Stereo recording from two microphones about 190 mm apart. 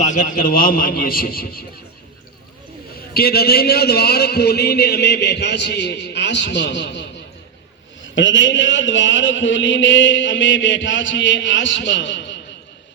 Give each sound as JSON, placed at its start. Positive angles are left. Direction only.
{"t": 0.0, "sound": "a man's voice", "side_deg": 40}
{"t": 3.2, "sound": "a man's voice", "side_deg": 55}
{"t": 8.0, "sound": "a man's voice", "side_deg": 75}